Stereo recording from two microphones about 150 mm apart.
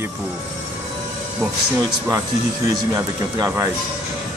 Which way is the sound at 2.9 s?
20° right (ahead or behind).